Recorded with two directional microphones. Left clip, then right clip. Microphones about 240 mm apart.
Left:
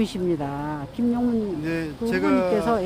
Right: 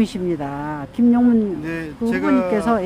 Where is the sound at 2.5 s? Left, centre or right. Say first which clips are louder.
Right 3 dB; centre.